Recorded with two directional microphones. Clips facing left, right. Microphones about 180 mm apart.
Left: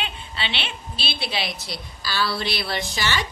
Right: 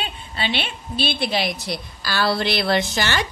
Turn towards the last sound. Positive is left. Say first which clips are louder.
# right 5 dB
turn(degrees=-50)  # may be behind; listen again after turning